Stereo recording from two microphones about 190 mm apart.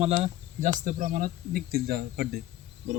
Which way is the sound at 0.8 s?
45° right (ahead or behind).